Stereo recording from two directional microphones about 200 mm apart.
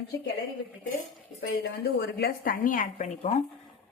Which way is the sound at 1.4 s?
60° left (ahead or behind).